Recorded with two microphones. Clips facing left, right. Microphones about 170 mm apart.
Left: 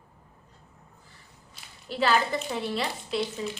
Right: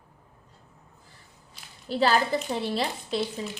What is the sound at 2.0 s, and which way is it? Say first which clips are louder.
Speech: right 1 dB; 35° right (ahead or behind).